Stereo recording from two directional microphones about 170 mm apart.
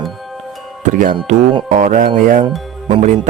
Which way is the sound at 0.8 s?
50° right (ahead or behind).